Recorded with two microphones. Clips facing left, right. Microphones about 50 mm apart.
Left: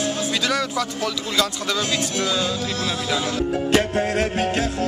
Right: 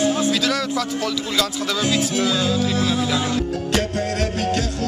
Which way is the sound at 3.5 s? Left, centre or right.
Left.